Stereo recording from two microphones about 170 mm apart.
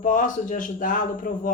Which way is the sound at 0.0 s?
50° left (ahead or behind).